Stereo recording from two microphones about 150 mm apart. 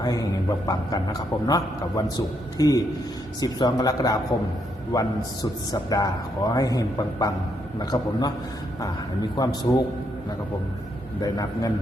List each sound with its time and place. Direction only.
0.0 s a man's voice: 25° left (ahead or behind)
9.3 s a man's voice: 25° left (ahead or behind)
11.2 s a man's voice: 25° left (ahead or behind)